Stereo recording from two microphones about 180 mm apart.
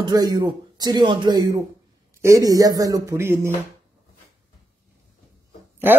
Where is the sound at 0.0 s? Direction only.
20° right (ahead or behind).